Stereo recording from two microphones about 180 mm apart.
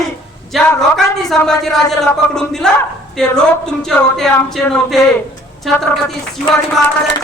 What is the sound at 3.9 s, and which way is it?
Speech, 5° left (ahead or behind).